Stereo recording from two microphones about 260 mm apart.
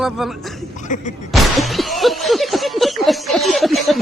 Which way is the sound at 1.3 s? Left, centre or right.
Centre.